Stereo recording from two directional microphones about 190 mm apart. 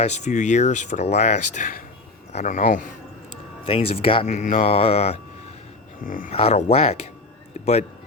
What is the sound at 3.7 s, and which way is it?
Speech, 30° left (ahead or behind).